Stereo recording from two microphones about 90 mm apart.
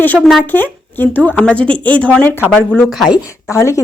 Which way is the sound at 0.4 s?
20° left (ahead or behind).